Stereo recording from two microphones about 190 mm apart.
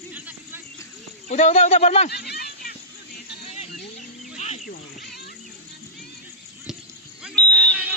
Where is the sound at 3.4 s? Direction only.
35° left (ahead or behind).